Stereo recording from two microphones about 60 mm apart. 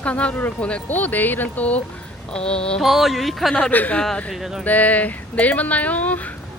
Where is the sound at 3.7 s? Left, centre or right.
Left.